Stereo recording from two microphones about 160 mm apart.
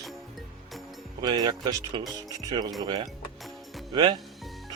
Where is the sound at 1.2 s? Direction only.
25° right (ahead or behind).